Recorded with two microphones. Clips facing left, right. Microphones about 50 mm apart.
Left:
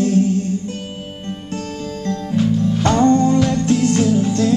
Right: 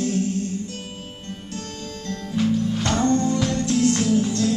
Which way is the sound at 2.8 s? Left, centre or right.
Left.